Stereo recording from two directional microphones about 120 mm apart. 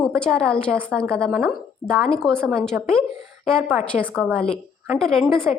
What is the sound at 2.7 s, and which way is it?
Speech, 15° right (ahead or behind).